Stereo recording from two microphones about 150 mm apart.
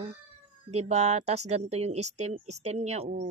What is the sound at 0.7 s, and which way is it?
Speech, 45° right (ahead or behind).